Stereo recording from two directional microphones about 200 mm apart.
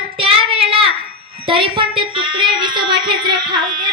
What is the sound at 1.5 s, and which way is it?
A woman's voice, 25° right (ahead or behind).